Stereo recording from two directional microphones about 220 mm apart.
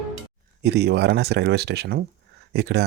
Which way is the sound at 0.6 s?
50° right (ahead or behind).